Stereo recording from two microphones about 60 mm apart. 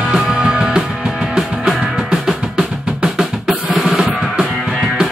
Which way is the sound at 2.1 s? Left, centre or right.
Centre.